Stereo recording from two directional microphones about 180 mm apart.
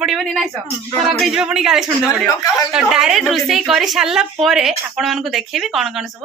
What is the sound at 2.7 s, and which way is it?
A woman's voice, 5° right (ahead or behind).